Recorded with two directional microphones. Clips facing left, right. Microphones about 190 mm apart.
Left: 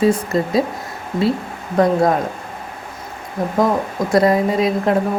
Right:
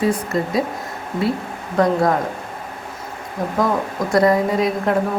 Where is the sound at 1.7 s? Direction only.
25° left (ahead or behind).